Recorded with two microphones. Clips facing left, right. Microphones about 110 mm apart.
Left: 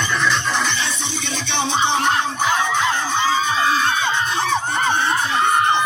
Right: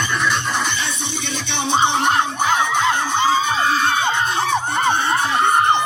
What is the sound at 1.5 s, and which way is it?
Music, 55° right (ahead or behind).